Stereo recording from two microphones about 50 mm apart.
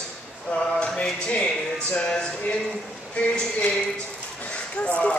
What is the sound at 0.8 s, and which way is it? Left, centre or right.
Speech, left.